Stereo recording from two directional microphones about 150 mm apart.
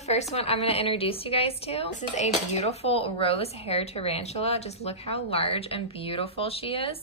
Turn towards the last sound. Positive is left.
turn(degrees=40)  # may be behind; listen again after turning